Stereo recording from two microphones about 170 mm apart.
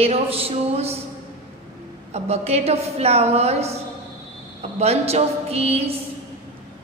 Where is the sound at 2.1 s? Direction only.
40° right (ahead or behind).